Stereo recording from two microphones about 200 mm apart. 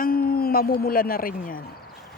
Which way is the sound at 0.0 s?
45° left (ahead or behind).